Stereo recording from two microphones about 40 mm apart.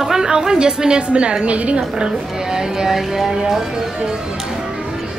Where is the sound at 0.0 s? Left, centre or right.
Centre; by 1.8 s right.